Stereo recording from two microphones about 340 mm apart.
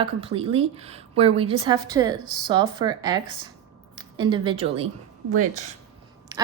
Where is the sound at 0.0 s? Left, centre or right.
Centre.